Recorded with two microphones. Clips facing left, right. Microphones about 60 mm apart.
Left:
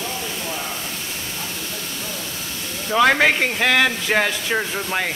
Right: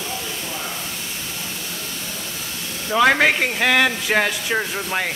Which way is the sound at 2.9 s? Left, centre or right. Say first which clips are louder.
Even; centre.